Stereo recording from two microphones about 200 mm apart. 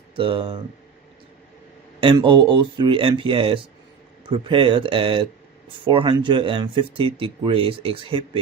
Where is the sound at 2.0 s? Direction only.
25° right (ahead or behind).